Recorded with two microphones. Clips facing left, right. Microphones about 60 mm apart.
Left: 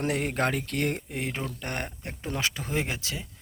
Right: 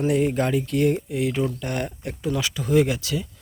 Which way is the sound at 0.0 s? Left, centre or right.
Left.